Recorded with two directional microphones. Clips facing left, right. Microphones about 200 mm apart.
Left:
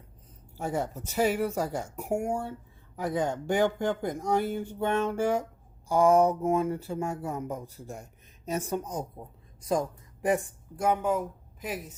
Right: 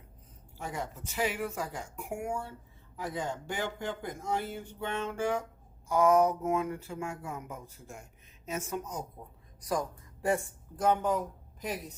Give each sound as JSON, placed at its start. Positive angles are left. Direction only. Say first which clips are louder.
{"t": 0.6, "sound": "speech", "louder": "left 7 dB", "side_deg": 40}
{"t": 2.9, "sound": "speech", "louder": "left 7 dB", "side_deg": 60}
{"t": 5.9, "sound": "speech", "louder": "left 3 dB", "side_deg": 30}